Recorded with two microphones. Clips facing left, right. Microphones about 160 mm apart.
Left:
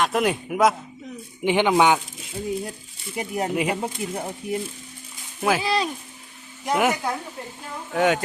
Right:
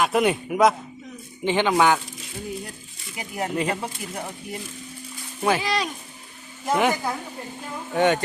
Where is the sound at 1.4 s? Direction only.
15° left (ahead or behind).